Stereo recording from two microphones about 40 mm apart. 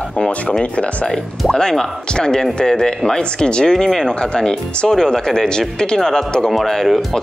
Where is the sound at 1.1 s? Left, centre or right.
Centre.